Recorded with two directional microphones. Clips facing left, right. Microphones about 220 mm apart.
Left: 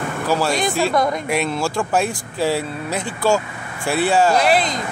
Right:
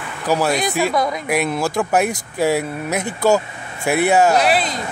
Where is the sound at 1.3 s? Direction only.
15° right (ahead or behind).